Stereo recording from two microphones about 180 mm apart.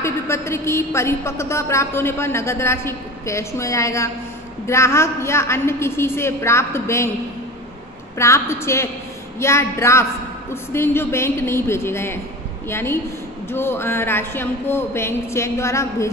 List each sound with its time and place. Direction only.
0.0 s a woman's voice: 15° left (ahead or behind)
8.2 s a woman's voice: 15° left (ahead or behind)